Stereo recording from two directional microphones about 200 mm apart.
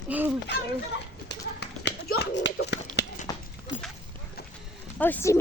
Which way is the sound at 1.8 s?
60° left (ahead or behind).